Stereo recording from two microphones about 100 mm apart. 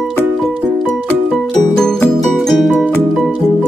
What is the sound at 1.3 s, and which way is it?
Music, 5° left (ahead or behind).